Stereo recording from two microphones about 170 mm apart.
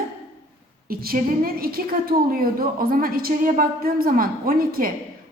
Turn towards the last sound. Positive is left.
turn(degrees=-55)  # may be behind; listen again after turning